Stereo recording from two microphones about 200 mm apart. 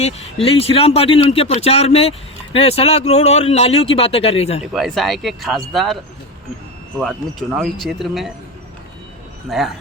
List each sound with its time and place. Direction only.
0.4 s speech: 30° left (ahead or behind)
4.7 s speech: centre (ahead or behind)
9.5 s speech: centre (ahead or behind)